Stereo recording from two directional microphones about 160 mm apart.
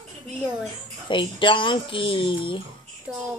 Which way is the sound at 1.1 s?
30° left (ahead or behind).